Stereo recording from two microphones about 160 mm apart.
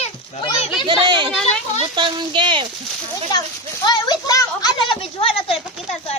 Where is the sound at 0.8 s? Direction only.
30° right (ahead or behind).